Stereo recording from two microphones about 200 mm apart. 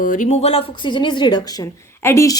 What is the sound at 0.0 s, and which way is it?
Speech, 40° left (ahead or behind).